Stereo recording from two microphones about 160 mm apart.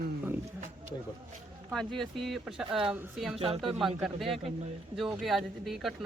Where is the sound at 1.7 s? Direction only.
5° left (ahead or behind).